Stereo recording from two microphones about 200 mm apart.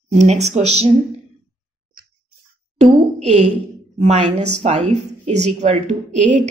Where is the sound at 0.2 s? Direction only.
35° right (ahead or behind).